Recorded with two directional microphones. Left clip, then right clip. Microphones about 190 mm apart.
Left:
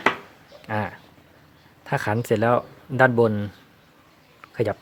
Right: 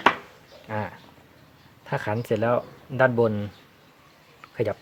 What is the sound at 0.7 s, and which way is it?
Speech, 25° left (ahead or behind).